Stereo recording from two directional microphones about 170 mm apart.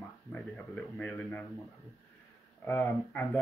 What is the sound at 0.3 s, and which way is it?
Speech, centre (ahead or behind).